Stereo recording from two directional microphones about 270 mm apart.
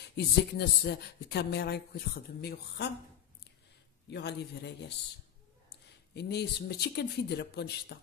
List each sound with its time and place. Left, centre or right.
0.1 s speech: left
4.1 s speech: left
6.1 s speech: left